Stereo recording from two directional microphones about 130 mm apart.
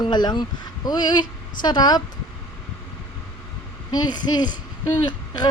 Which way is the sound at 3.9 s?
30° left (ahead or behind).